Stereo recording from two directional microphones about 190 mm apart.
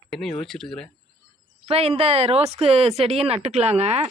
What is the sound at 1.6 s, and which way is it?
Speech, 30° right (ahead or behind).